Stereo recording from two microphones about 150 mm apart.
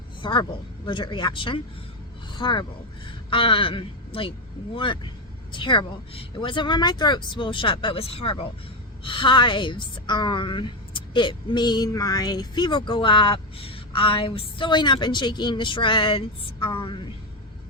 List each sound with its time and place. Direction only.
0.2 s a woman's voice: 35° left (ahead or behind)